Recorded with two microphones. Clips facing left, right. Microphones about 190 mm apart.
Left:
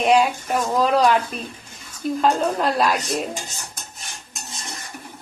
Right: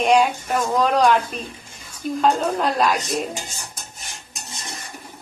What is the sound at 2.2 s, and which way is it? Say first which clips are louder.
A woman's voice: even; centre (ahead or behind).